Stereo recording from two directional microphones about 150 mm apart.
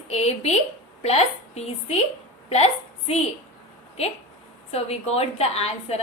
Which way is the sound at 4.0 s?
45° left (ahead or behind).